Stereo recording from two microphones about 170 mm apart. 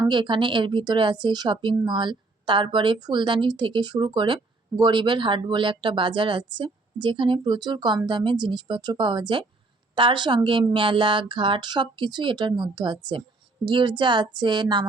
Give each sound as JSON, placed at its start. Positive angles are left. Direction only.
{"t": 0.0, "sound": "speech", "side_deg": -25}